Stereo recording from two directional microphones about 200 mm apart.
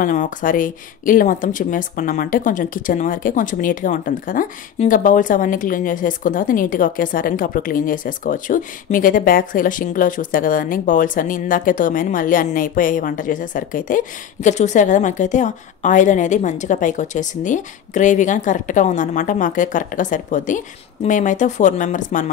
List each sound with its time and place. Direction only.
0.0 s speech: 40° left (ahead or behind)